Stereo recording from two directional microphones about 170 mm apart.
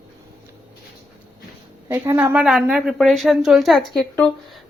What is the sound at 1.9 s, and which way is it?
Speech, 20° right (ahead or behind).